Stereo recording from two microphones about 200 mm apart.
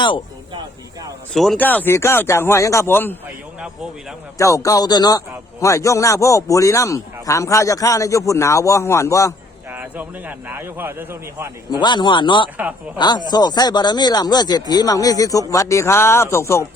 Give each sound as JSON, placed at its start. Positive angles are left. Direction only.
{"t": 1.3, "sound": "a man's voice", "side_deg": 0}
{"t": 4.4, "sound": "a man's voice", "side_deg": 15}
{"t": 9.6, "sound": "a man's voice", "side_deg": -10}
{"t": 11.7, "sound": "speech", "side_deg": 20}